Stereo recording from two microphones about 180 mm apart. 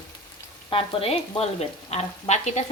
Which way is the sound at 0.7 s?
30° left (ahead or behind).